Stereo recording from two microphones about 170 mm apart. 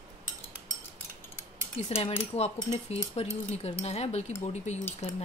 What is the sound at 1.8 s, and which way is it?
Cutlery, 35° left (ahead or behind).